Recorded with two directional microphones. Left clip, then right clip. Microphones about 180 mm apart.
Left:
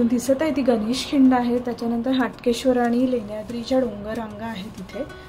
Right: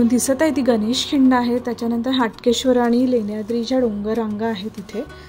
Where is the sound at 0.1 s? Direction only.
55° right (ahead or behind).